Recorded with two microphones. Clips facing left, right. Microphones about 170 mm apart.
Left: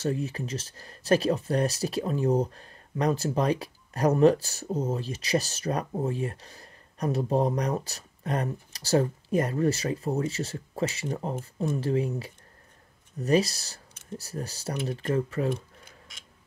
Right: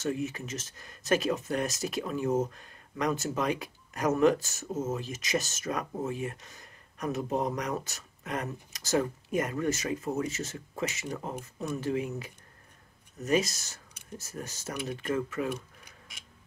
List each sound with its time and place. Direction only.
0.0 s speech: 35° left (ahead or behind)